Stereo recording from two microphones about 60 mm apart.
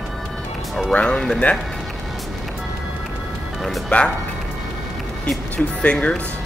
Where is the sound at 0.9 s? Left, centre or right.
Centre.